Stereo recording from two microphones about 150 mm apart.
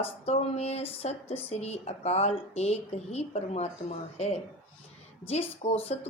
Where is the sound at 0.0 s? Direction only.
45° left (ahead or behind).